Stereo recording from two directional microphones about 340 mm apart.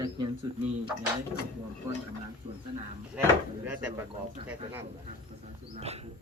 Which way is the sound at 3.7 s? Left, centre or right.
Centre.